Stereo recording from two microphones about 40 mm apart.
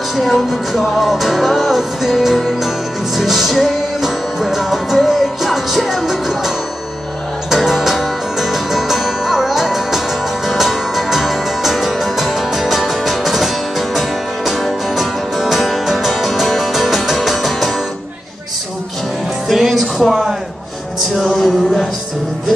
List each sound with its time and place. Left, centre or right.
0.1 s music: centre
19.5 s music: centre
20.1 s a sound: centre
21.4 s music: centre